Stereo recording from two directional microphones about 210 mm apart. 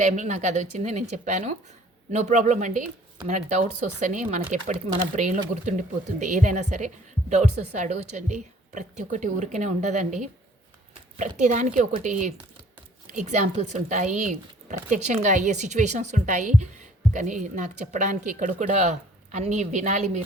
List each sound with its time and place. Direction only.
0.0 s speech: 35° right (ahead or behind)